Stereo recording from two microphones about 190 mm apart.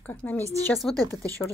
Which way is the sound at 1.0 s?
20° right (ahead or behind).